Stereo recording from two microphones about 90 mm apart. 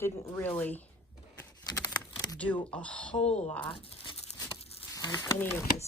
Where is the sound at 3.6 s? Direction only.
80° left.